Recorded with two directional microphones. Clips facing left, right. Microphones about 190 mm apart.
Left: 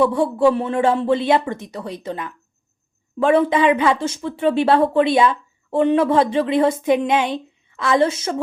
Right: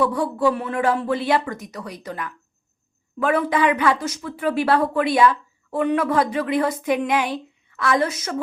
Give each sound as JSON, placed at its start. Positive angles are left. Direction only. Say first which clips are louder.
{"t": 0.0, "sound": "speech", "louder": "left 4 dB", "side_deg": 25}